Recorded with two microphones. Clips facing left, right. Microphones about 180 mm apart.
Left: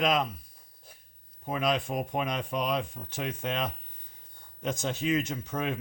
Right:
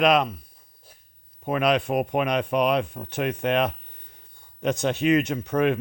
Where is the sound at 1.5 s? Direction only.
65° right (ahead or behind).